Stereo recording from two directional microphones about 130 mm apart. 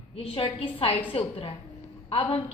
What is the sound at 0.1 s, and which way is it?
A woman's voice, 45° left (ahead or behind).